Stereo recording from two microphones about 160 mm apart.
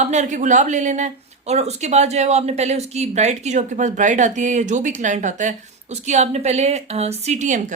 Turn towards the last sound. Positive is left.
turn(degrees=-50)  # may be behind; listen again after turning